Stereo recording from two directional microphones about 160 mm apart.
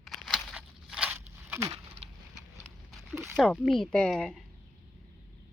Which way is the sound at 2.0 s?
40° right (ahead or behind).